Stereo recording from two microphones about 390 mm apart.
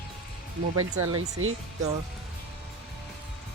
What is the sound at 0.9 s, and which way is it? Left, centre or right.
Speech, right.